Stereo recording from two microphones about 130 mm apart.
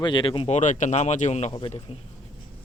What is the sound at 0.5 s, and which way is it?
Speech, 70° left (ahead or behind).